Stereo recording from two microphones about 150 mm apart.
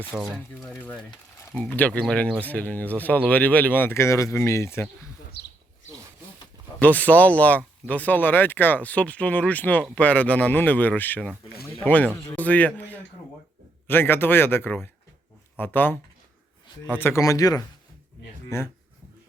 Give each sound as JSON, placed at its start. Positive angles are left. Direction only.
{"t": 0.0, "sound": "speech", "side_deg": -10}
{"t": 1.5, "sound": "speech", "side_deg": 10}
{"t": 5.4, "sound": "a sound", "side_deg": 90}
{"t": 6.7, "sound": "speech", "side_deg": 10}
{"t": 17.0, "sound": "speech", "side_deg": 20}